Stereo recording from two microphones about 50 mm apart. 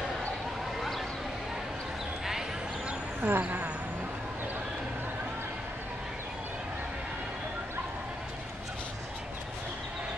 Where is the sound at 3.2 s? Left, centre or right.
Right.